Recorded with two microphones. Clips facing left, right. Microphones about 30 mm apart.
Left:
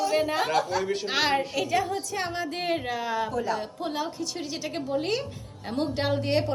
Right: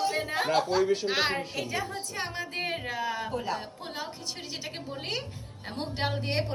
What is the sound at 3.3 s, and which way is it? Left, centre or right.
Music, right.